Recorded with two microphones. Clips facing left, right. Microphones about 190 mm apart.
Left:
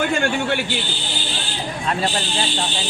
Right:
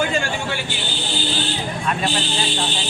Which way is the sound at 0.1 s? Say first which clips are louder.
Left 3 dB; 60° left (ahead or behind).